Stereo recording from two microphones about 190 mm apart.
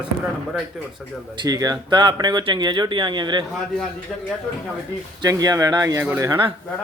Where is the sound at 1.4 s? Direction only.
20° right (ahead or behind).